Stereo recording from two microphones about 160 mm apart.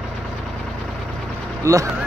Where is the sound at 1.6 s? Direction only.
20° right (ahead or behind).